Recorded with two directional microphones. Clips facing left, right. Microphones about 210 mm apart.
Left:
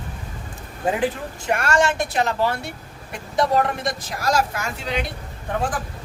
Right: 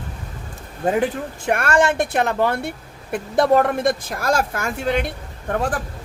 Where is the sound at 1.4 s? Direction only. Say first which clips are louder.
Right 2 dB; 55° right (ahead or behind).